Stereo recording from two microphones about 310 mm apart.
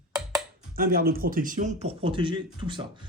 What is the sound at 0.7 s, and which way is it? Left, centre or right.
A man's voice, right.